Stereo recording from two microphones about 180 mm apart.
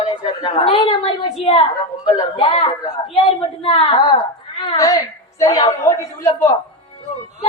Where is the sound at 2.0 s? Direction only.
30° left (ahead or behind).